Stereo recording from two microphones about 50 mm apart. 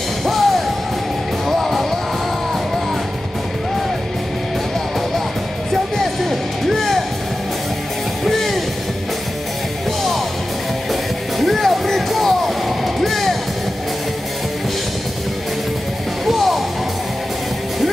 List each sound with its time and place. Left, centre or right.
0.2 s music: centre
5.7 s music: centre
8.3 s music: centre
10.9 s music: centre
16.3 s music: centre